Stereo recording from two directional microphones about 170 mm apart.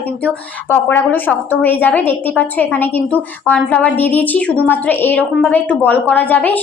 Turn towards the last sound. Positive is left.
turn(degrees=10)  # may be behind; listen again after turning